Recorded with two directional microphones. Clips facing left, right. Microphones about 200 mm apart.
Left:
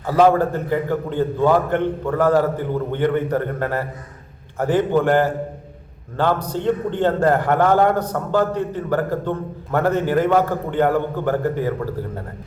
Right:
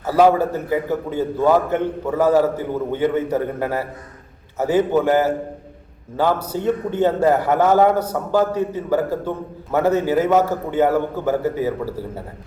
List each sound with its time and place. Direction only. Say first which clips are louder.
0.0 s a man's voice: even; 10° right (ahead or behind)